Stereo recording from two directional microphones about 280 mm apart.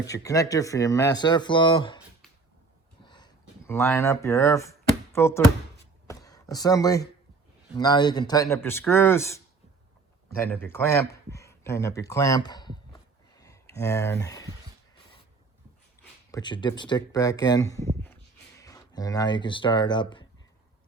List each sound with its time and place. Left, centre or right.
0.0 s speech: centre
3.0 s a sound: centre
7.8 s speech: centre
16.3 s speech: centre